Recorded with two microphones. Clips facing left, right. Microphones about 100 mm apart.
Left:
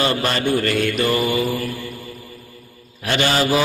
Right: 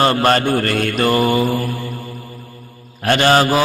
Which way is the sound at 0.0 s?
50° right (ahead or behind).